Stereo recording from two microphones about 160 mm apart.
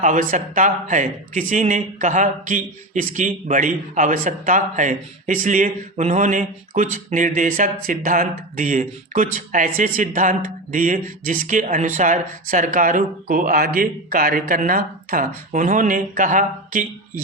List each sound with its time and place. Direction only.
0.0 s speech: 55° right (ahead or behind)